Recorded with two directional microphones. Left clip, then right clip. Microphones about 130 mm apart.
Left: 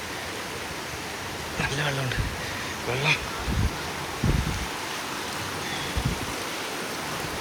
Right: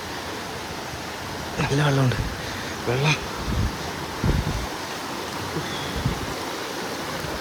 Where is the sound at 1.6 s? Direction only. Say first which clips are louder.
Right 4 dB; 45° right (ahead or behind).